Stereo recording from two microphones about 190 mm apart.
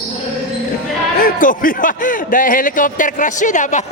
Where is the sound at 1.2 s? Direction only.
45° left (ahead or behind).